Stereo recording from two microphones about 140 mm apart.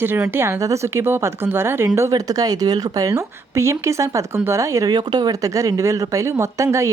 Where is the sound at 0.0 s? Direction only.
15° right (ahead or behind).